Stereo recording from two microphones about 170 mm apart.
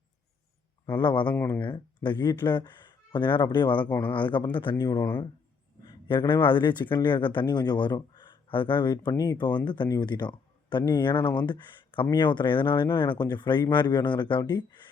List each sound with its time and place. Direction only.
0.9 s speech: 25° left (ahead or behind)